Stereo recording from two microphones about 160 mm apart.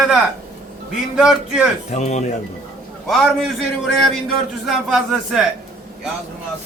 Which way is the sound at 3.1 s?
Centre (ahead or behind).